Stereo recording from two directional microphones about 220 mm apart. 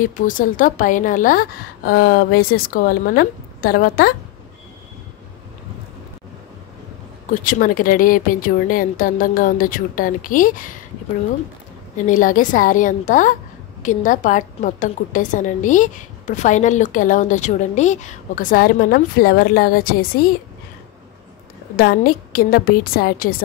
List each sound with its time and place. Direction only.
0.0 s a woman's voice: 35° left (ahead or behind)
7.2 s a woman's voice: 35° left (ahead or behind)
12.1 s a woman's voice: 35° left (ahead or behind)
21.7 s a woman's voice: 45° left (ahead or behind)